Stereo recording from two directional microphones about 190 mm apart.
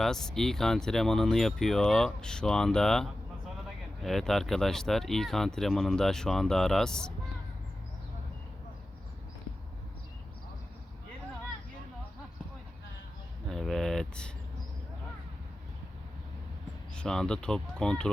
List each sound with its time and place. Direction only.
0.0 s speech: centre (ahead or behind)
13.5 s a sound: centre (ahead or behind)
16.9 s speech: 5° left (ahead or behind)